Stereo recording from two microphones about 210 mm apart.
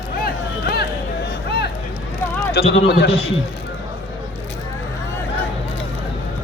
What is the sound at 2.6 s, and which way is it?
Speech, 55° left (ahead or behind).